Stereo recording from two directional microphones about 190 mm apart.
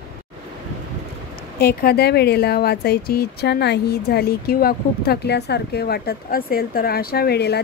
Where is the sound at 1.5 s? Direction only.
55° left (ahead or behind).